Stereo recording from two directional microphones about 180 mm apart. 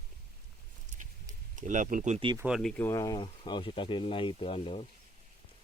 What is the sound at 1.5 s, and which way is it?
Speech, 45° right (ahead or behind).